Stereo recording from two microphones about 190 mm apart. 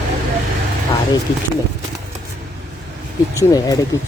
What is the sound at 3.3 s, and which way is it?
Speech, 20° left (ahead or behind).